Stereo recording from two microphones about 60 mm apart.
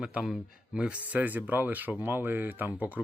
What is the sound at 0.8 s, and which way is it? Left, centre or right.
Speech, right.